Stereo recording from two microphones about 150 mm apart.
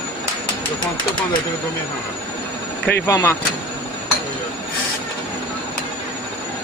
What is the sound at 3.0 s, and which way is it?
Speech, 20° left (ahead or behind).